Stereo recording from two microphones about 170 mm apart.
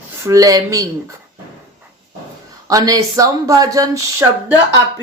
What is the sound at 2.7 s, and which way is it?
Speech, 20° right (ahead or behind).